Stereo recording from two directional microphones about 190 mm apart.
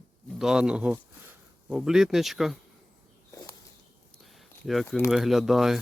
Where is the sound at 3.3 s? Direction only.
20° left (ahead or behind).